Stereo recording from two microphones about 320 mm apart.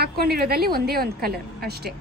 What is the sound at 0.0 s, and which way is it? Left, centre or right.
A woman's voice, right.